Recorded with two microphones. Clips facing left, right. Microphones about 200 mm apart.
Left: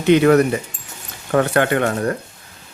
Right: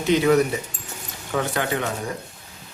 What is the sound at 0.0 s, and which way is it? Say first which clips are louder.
Speech: left 5 dB; 65° left (ahead or behind).